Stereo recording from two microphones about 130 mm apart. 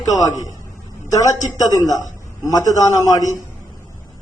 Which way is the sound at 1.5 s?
25° left (ahead or behind).